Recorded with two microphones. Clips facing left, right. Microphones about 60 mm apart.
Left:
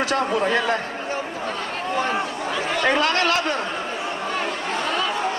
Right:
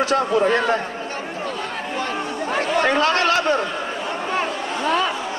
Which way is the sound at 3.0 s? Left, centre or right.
Centre.